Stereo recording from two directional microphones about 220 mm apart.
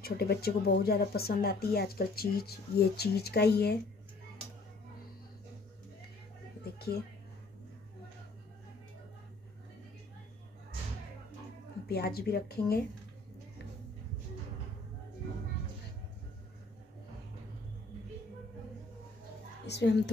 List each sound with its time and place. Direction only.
0.0 s speech: 45° left (ahead or behind)
6.6 s music: 45° left (ahead or behind)
11.9 s speech: 45° left (ahead or behind)
19.6 s a woman's voice: 50° left (ahead or behind)